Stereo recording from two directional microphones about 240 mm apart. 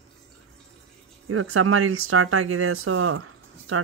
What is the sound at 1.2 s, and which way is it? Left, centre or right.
Speech, right.